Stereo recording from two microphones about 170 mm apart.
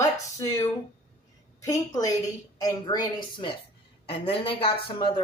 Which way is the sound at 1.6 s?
20° left (ahead or behind).